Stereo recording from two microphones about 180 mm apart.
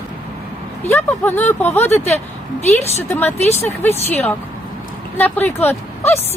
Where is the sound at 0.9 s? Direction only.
10° left (ahead or behind).